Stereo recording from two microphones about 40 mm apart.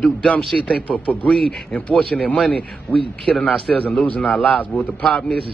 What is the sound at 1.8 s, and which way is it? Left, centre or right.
Speech, left.